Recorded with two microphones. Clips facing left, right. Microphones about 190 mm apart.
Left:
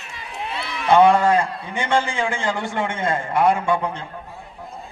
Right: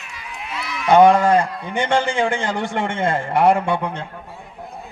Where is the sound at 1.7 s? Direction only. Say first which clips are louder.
Right 3 dB; 60° right (ahead or behind).